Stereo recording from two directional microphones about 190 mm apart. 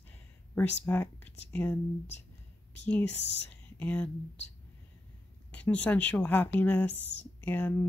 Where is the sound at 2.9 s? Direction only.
10° left (ahead or behind).